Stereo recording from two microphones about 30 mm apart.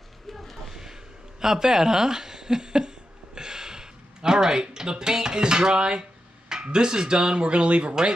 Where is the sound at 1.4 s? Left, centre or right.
Centre.